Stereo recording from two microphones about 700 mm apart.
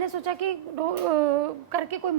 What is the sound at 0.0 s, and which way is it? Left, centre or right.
A woman's voice, right.